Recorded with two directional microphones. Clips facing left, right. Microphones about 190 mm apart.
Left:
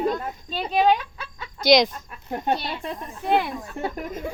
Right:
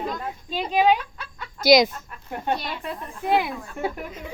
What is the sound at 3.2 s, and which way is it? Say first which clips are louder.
Speech: even; 10° right (ahead or behind).